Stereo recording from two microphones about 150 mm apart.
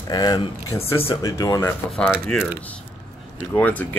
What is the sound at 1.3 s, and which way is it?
Speech, 25° left (ahead or behind).